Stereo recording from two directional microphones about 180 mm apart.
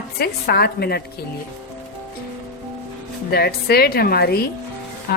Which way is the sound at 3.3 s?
60° left (ahead or behind).